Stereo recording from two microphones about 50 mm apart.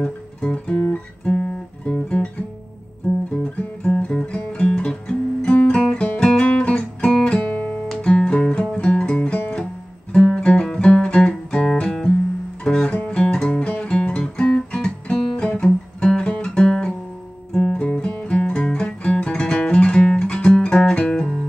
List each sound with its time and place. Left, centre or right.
0.0 s music: centre
1.2 s guitar: centre
3.4 s music: left
4.5 s guitar: left
5.9 s music: left
7.5 s guitar: left
8.0 s music: centre
12.9 s guitar: left
15.6 s music: centre
17.8 s music: left
20.2 s guitar: left